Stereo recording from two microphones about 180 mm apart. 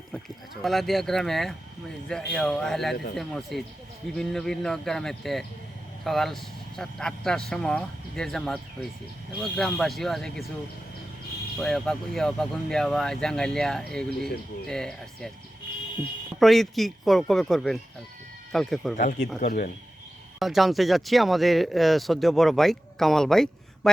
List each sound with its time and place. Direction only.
0.6 s speech: centre (ahead or behind)
11.6 s speech: centre (ahead or behind)
16.4 s speech: centre (ahead or behind)
18.9 s speech: 45° left (ahead or behind)
20.4 s speech: centre (ahead or behind)